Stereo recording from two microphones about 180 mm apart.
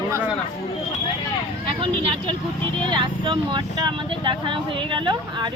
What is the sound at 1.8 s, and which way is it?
Speech, 30° right (ahead or behind).